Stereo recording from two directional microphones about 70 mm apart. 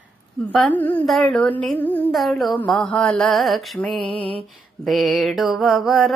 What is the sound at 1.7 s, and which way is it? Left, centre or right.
Music, left.